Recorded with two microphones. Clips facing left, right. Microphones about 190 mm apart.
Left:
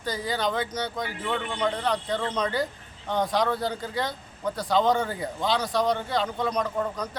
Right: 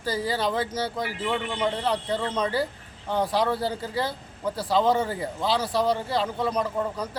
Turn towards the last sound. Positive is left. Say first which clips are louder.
# right 1 dB
turn(degrees=-5)  # may be behind; listen again after turning